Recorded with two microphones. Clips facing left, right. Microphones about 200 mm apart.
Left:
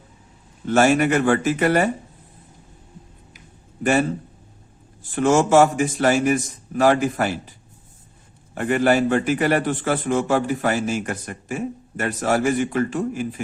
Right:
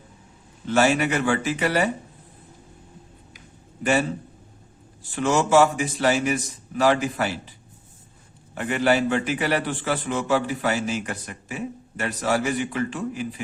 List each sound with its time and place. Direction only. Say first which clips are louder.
0.7 s a man's voice: left 4 dB; 50° left (ahead or behind)
5.1 s a man's voice: left 3 dB; 50° left (ahead or behind)
8.5 s a man's voice: left 3 dB; 45° left (ahead or behind)